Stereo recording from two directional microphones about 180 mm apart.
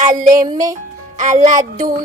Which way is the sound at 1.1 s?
40° right (ahead or behind).